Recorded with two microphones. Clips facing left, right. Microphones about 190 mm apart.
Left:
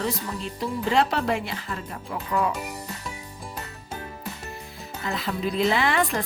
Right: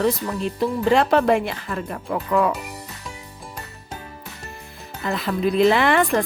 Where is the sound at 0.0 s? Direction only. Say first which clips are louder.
Right 7 dB; 60° right (ahead or behind).